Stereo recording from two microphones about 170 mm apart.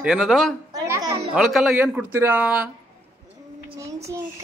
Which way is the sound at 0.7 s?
20° right (ahead or behind).